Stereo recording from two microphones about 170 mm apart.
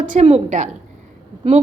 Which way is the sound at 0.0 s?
45° right (ahead or behind).